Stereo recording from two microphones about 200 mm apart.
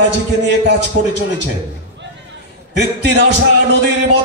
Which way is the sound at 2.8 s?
60° right (ahead or behind).